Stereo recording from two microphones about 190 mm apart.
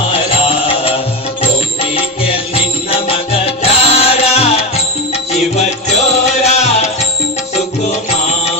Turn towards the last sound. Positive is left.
turn(degrees=35)  # may be behind; listen again after turning